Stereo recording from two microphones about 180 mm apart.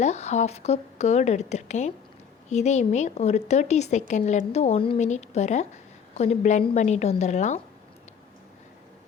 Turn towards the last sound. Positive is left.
turn(degrees=40)  # may be behind; listen again after turning